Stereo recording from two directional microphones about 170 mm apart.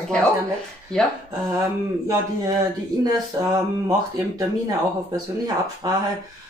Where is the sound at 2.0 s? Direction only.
25° right (ahead or behind).